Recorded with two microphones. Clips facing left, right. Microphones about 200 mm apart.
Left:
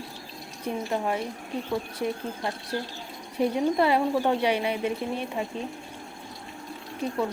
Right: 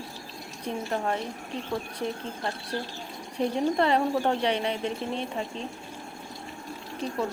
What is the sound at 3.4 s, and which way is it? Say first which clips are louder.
A woman's voice: left 2 dB; 10° left (ahead or behind).